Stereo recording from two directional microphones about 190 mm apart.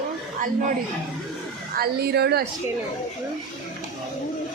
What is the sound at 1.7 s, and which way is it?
Speech, 55° right (ahead or behind).